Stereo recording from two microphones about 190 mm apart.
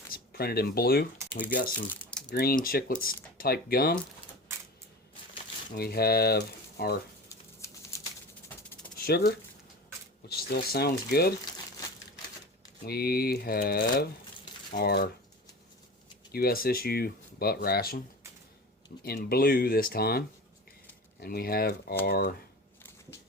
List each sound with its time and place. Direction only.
0.1 s speech: 55° left (ahead or behind)
1.9 s a sound: 5° left (ahead or behind)
2.3 s speech: 55° left (ahead or behind)
5.7 s speech: 55° left (ahead or behind)
7.3 s a sound: 15° left (ahead or behind)
9.0 s a sound: 55° left (ahead or behind)
10.2 s speech: 55° left (ahead or behind)
12.8 s speech: 55° left (ahead or behind)
16.3 s speech: 55° left (ahead or behind)
19.0 s speech: 55° left (ahead or behind)